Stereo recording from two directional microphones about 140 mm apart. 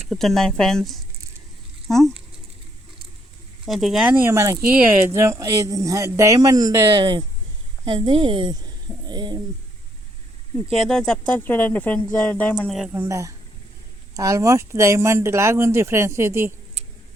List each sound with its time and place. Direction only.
0.1 s speech: centre (ahead or behind)
3.7 s speech: centre (ahead or behind)
4.1 s speech: 15° right (ahead or behind)
10.7 s speech: centre (ahead or behind)
12.5 s speech: 5° right (ahead or behind)
12.9 s speech: 20° right (ahead or behind)